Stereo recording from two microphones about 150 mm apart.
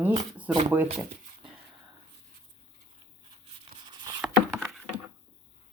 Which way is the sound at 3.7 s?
85° right.